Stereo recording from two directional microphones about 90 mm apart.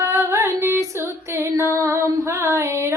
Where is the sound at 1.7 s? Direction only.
35° right (ahead or behind).